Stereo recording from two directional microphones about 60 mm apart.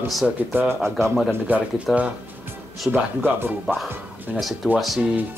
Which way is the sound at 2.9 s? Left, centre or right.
Centre.